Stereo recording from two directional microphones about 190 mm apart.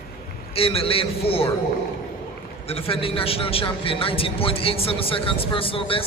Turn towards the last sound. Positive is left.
turn(degrees=30)  # may be behind; listen again after turning